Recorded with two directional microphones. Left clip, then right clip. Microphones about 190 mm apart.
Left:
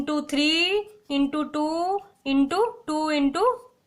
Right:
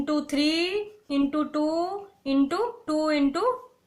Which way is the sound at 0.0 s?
25° left (ahead or behind).